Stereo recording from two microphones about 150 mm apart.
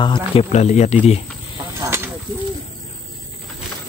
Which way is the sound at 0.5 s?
50° left (ahead or behind).